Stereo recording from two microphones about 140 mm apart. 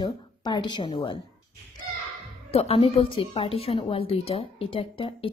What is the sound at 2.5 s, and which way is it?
A woman's voice, 45° left (ahead or behind).